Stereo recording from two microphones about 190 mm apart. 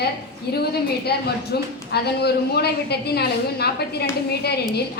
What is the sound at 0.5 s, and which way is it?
A woman's voice, 55° left (ahead or behind).